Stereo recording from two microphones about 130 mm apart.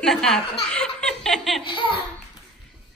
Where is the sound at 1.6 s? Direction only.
40° left (ahead or behind).